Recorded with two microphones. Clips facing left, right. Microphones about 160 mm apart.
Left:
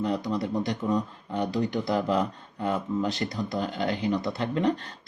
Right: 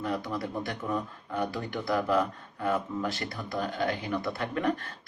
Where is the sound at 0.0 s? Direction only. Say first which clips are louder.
Left 4 dB; 20° left (ahead or behind).